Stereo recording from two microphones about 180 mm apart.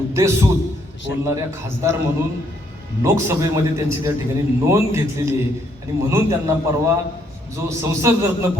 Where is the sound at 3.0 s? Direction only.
15° right (ahead or behind).